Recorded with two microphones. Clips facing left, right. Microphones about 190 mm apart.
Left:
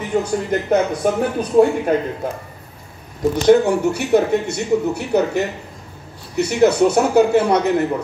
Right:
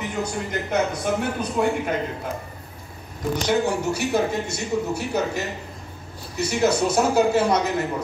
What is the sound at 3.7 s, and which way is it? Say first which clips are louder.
A man's voice: left 7 dB; 60° left (ahead or behind).